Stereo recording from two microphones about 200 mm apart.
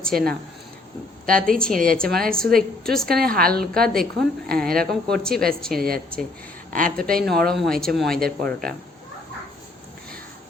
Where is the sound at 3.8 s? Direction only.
5° left (ahead or behind).